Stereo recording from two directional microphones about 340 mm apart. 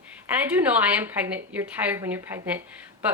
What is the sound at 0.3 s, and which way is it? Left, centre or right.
Speech, centre.